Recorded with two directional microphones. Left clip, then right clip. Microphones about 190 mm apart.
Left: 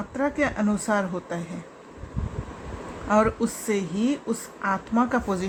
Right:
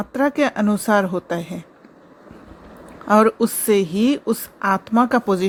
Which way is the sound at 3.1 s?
45° right (ahead or behind).